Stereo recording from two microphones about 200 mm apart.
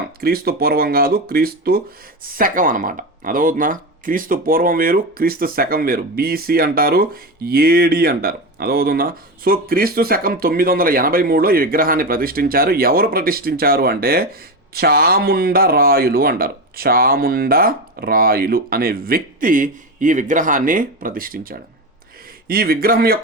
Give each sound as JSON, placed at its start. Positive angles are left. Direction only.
{"t": 0.2, "sound": "speech", "side_deg": -50}